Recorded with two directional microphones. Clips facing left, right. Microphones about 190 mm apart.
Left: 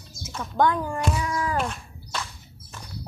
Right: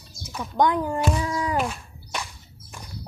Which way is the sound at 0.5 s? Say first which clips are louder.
Right 1 dB; 15° right (ahead or behind).